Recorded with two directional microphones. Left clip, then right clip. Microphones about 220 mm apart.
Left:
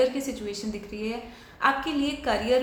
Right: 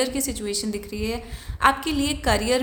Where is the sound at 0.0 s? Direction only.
50° right (ahead or behind).